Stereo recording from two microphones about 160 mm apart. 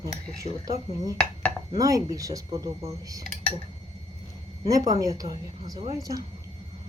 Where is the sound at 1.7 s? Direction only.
20° right (ahead or behind).